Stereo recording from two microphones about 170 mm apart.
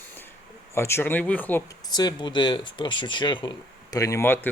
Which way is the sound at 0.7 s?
15° left (ahead or behind).